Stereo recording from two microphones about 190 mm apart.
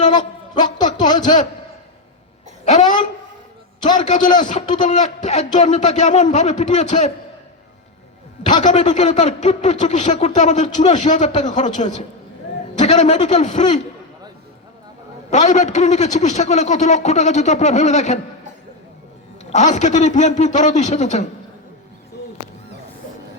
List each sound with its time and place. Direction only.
0.2 s a sound: 20° left (ahead or behind)
2.6 s speech: 35° left (ahead or behind)
4.0 s speech: 40° left (ahead or behind)
8.6 s speech: 40° left (ahead or behind)
15.3 s speech: 40° left (ahead or behind)
19.5 s speech: 35° left (ahead or behind)